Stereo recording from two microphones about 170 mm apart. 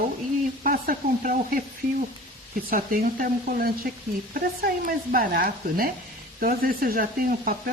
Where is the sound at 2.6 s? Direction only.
55° right (ahead or behind).